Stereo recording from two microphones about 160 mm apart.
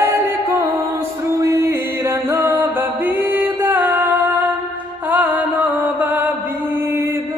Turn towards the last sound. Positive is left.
turn(degrees=-10)  # may be behind; listen again after turning